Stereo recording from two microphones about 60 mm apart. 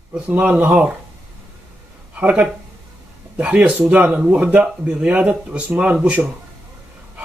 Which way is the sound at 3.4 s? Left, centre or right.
Right.